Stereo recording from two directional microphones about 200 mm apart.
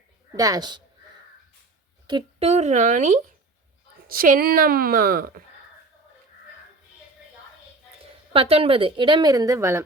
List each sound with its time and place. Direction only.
0.3 s a woman's voice: 15° right (ahead or behind)
2.0 s a woman's voice: 25° right (ahead or behind); by 5.3 s 45° right (ahead or behind)
8.3 s a woman's voice: 30° right (ahead or behind); by 9.8 s 15° right (ahead or behind)